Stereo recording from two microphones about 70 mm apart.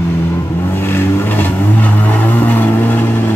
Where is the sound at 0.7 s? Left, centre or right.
Left.